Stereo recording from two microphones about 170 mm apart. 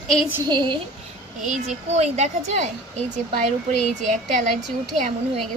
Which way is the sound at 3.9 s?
45° right (ahead or behind).